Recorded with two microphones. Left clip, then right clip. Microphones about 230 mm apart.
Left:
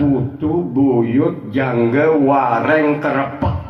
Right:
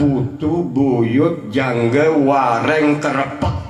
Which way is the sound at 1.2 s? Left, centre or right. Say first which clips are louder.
Right 1 dB; right.